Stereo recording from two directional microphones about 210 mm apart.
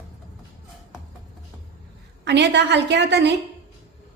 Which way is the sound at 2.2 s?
55° right (ahead or behind).